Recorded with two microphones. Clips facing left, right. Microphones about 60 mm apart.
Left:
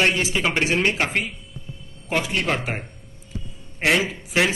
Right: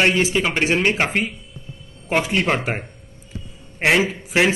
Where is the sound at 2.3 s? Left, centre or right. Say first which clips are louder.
Right 4 dB; right.